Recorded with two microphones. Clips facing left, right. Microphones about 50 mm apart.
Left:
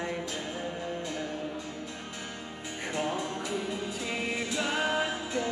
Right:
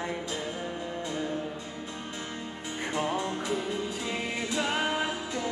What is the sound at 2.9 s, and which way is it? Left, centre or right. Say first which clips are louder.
Music: right 2 dB; right.